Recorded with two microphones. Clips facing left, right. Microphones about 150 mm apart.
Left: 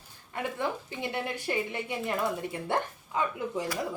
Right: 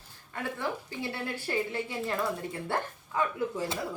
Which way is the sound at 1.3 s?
20° left (ahead or behind).